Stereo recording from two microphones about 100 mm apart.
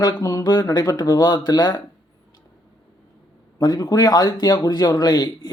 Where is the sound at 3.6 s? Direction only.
40° left (ahead or behind).